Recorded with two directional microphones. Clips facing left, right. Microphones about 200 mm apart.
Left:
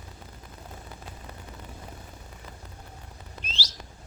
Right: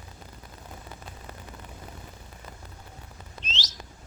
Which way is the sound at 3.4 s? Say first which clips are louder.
Right 1 dB; 10° left (ahead or behind).